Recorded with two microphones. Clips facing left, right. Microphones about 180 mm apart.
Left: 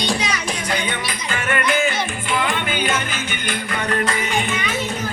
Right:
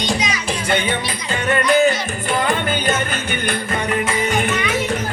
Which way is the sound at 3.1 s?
60° right (ahead or behind).